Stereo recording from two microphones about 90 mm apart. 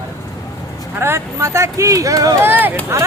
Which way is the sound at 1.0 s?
30° right (ahead or behind).